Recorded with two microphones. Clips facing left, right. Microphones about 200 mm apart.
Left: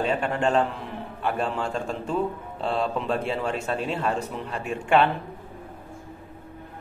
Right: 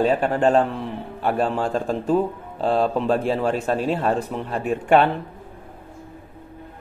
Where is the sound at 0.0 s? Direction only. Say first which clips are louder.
Right 6 dB; 35° right (ahead or behind).